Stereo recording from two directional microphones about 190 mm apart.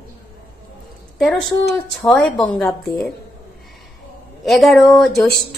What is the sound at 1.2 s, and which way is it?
A woman's voice, centre (ahead or behind).